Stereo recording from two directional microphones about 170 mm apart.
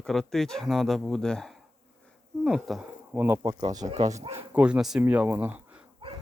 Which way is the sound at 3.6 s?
25° right (ahead or behind).